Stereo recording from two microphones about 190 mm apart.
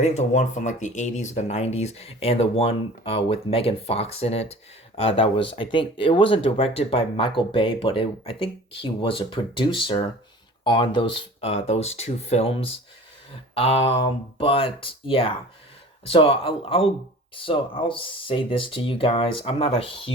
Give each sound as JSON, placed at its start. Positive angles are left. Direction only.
{"t": 0.0, "sound": "speech", "side_deg": 35}